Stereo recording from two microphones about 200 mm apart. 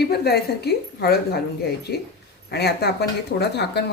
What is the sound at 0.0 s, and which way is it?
A woman's voice, 50° left (ahead or behind).